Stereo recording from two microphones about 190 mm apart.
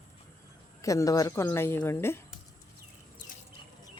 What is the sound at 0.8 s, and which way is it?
Speech, 15° left (ahead or behind).